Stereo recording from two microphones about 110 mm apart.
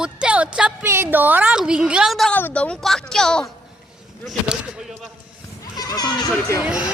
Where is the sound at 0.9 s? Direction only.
20° right (ahead or behind); by 2.3 s centre (ahead or behind).